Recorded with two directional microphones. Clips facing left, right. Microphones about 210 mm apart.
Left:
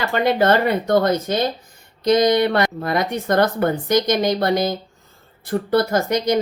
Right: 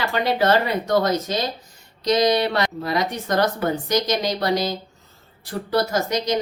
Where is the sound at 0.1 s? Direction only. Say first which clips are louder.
Left 3 dB; 50° left (ahead or behind).